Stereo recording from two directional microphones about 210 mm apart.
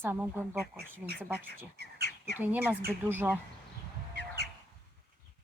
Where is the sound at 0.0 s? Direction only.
10° right (ahead or behind).